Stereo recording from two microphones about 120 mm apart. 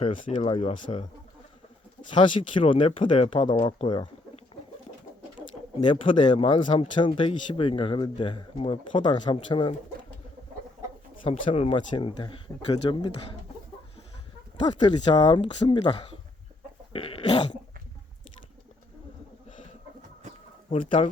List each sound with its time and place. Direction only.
0.0 s speech: 75° left (ahead or behind)
0.6 s speech: 60° left (ahead or behind)
2.0 s speech: 45° left (ahead or behind)
5.8 s speech: 45° left (ahead or behind)
11.2 s speech: 50° left (ahead or behind)
14.6 s speech: 40° left (ahead or behind)
16.9 s a sound: 50° left (ahead or behind)
20.7 s speech: 50° left (ahead or behind)